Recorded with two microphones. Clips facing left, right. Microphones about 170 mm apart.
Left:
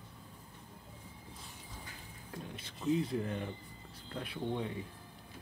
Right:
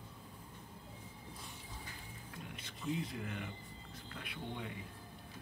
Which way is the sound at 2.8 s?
35° left (ahead or behind).